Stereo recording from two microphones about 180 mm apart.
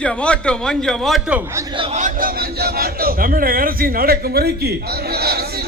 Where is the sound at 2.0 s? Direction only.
45° right (ahead or behind).